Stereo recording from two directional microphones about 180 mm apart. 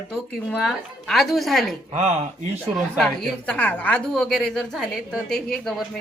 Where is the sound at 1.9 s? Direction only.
40° right (ahead or behind).